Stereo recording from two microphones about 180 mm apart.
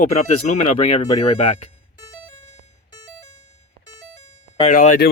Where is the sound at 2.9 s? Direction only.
20° left (ahead or behind).